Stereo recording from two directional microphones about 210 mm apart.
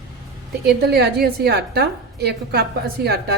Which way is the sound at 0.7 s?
50° right (ahead or behind).